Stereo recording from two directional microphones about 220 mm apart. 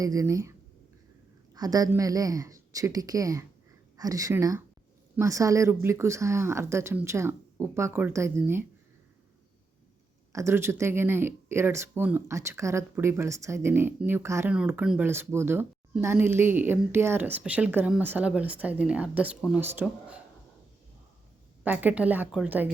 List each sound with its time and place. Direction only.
0.0 s speech: 15° right (ahead or behind)
1.5 s speech: 15° right (ahead or behind)
10.3 s speech: 10° right (ahead or behind)
21.6 s speech: 5° right (ahead or behind)